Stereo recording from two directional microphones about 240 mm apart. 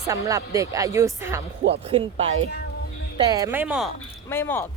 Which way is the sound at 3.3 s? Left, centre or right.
Centre.